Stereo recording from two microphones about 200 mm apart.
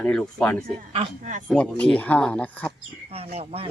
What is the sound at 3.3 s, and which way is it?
Speech, 30° right (ahead or behind).